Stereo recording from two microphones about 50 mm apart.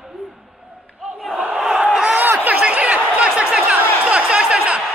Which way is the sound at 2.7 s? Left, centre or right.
Right.